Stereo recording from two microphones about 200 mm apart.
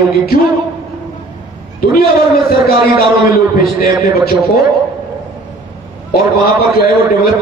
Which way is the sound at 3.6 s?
50° left (ahead or behind).